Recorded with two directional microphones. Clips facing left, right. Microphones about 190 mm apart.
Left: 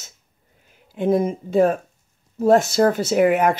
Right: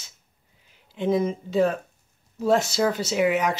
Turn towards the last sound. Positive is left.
turn(degrees=50)  # may be behind; listen again after turning